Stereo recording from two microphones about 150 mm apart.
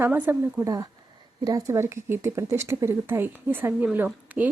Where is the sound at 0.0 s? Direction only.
15° right (ahead or behind).